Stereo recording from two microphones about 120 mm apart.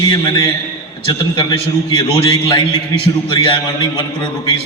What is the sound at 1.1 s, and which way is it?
A man's voice, 45° left (ahead or behind).